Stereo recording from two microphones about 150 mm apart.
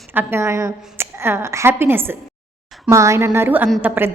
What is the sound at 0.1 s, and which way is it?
A woman's voice, 15° right (ahead or behind).